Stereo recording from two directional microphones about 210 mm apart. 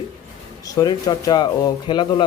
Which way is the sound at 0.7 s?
20° left (ahead or behind).